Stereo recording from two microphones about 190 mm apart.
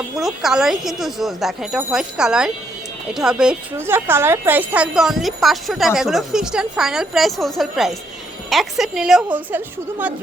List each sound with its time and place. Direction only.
0.2 s a woman's voice: centre (ahead or behind)